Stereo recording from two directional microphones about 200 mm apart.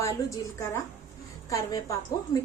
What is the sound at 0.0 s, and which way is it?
A woman's voice, 15° left (ahead or behind).